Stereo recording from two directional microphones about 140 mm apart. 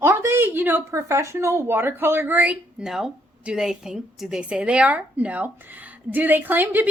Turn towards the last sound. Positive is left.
turn(degrees=-15)  # may be behind; listen again after turning